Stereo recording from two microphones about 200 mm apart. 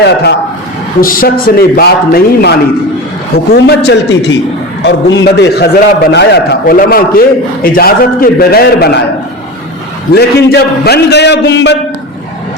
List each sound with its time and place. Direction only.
0.0 s a man's voice: 55° left (ahead or behind)
10.2 s a man's voice: 55° left (ahead or behind)